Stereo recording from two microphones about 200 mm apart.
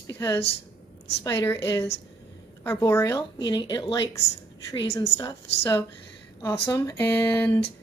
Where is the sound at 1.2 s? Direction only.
15° left (ahead or behind).